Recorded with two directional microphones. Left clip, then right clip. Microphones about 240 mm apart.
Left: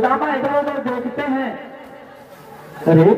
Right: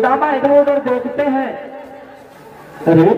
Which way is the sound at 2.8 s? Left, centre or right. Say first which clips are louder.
Right 2 dB; right.